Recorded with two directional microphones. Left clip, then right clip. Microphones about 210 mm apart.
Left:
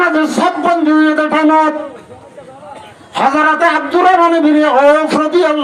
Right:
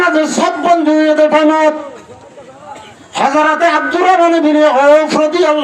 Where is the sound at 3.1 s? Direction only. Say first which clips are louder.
Even; 15° right (ahead or behind).